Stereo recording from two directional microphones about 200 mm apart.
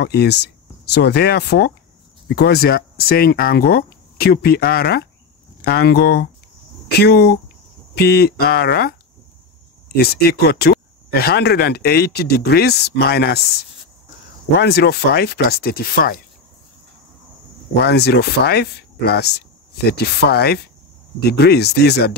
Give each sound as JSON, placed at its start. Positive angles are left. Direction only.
{"t": 0.0, "sound": "speech", "side_deg": 55}
{"t": 9.9, "sound": "speech", "side_deg": 50}
{"t": 14.6, "sound": "speech", "side_deg": 55}
{"t": 17.8, "sound": "speech", "side_deg": 55}